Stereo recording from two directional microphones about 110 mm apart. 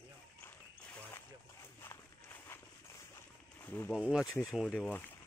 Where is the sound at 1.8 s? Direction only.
20° left (ahead or behind).